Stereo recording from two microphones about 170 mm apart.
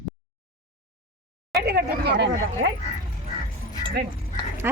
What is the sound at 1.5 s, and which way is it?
Speech, 70° right (ahead or behind).